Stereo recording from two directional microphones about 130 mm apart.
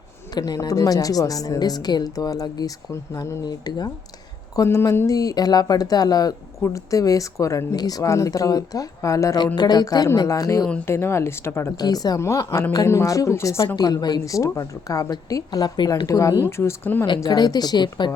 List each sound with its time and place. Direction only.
0.3 s speech: 30° left (ahead or behind)
11.8 s speech: 30° left (ahead or behind)
17.2 s speech: 30° left (ahead or behind)